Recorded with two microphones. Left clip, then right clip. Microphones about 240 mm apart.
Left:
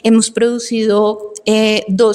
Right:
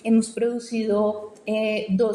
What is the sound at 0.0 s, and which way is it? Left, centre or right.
A woman's voice, left.